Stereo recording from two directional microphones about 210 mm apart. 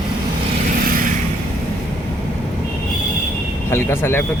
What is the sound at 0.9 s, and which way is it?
Vehicle, 40° right (ahead or behind).